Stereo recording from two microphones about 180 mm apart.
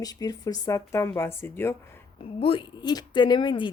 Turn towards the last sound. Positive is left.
turn(degrees=25)  # may be behind; listen again after turning